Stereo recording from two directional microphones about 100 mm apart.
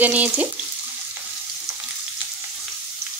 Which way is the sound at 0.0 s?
15° right (ahead or behind).